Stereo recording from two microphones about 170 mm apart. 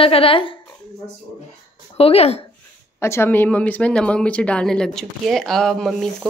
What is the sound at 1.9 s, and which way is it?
Speech, 35° left (ahead or behind).